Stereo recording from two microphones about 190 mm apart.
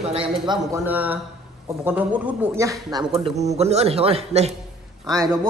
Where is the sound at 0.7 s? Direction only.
10° right (ahead or behind).